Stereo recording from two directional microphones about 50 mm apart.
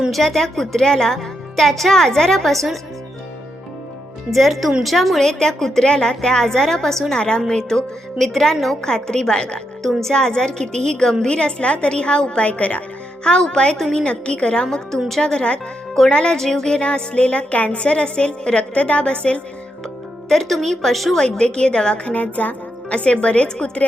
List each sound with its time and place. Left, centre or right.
0.1 s a woman's voice: centre
4.3 s a woman's voice: centre; by 12.8 s left
13.2 s a woman's voice: centre
20.2 s a woman's voice: centre
21.2 s a woman's voice: centre
22.1 s a woman's voice: left